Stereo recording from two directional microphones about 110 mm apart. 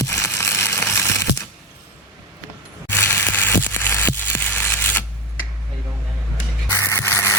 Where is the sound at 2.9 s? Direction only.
20° left (ahead or behind).